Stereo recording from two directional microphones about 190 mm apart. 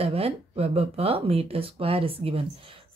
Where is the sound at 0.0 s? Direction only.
30° right (ahead or behind).